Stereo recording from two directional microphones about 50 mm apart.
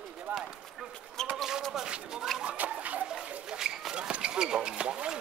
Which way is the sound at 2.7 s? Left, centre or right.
Right.